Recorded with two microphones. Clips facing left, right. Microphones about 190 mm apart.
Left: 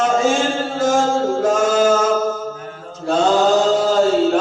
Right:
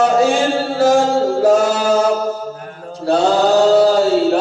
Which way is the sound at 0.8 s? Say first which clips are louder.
Right 4 dB; 35° right (ahead or behind).